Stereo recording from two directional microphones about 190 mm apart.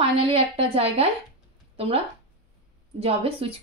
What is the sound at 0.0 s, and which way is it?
A woman's voice, 30° right (ahead or behind).